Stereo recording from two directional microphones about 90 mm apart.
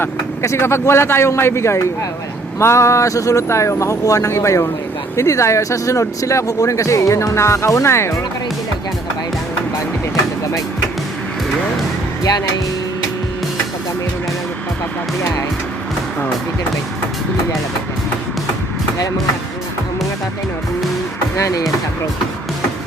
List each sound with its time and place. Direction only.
0.0 s speech: 30° left (ahead or behind)
21.3 s speech: 35° left (ahead or behind)